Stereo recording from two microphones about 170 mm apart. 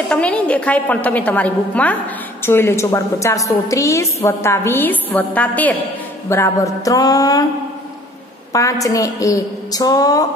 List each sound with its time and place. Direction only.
0.1 s a woman's voice: 5° left (ahead or behind)
8.5 s a woman's voice: 20° left (ahead or behind)